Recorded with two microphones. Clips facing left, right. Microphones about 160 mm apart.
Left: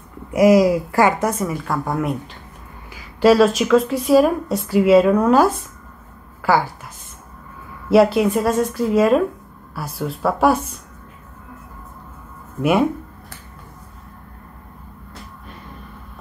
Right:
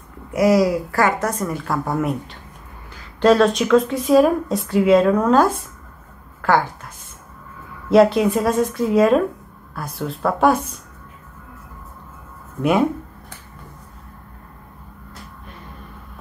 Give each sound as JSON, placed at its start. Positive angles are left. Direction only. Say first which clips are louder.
{"t": 0.3, "sound": "a woman's voice", "louder": "left 3 dB", "side_deg": 15}
{"t": 1.4, "sound": "a woman's voice", "louder": "even", "side_deg": 0}
{"t": 7.9, "sound": "speech", "louder": "even", "side_deg": 5}